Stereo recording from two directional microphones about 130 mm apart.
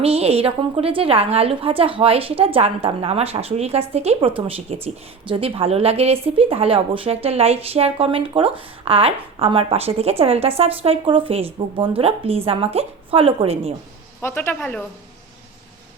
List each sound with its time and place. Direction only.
0.0 s speech: 50° right (ahead or behind)
14.2 s speech: 20° left (ahead or behind)
14.6 s a woman's voice: 10° left (ahead or behind)